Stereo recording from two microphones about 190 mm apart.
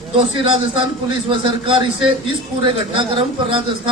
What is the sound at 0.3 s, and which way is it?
Speech, 25° right (ahead or behind).